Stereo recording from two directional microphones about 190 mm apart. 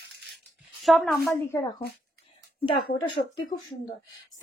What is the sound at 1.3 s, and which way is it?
Speech, 15° left (ahead or behind).